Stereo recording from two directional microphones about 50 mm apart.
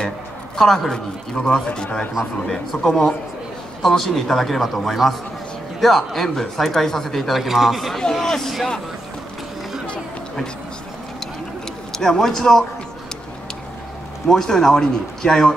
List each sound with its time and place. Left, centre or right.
0.6 s a man's voice: centre
2.2 s a man's voice: centre
2.8 s a man's voice: centre
11.9 s a man's voice: centre
14.2 s a man's voice: centre